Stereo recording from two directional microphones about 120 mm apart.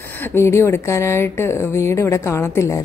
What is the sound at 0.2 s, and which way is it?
A woman's voice, 20° left (ahead or behind).